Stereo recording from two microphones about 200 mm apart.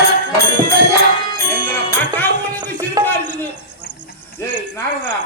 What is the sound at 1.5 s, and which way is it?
Music, 10° left (ahead or behind).